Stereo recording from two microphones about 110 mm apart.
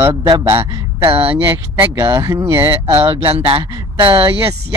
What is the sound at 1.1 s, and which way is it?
Speech, 60° right (ahead or behind).